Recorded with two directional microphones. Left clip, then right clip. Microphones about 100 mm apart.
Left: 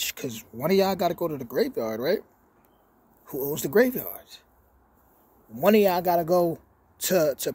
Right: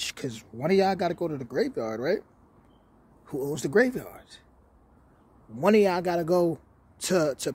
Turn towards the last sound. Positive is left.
turn(degrees=-45)  # may be behind; listen again after turning